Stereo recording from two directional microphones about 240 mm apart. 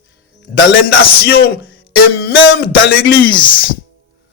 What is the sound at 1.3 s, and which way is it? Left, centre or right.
Music, left.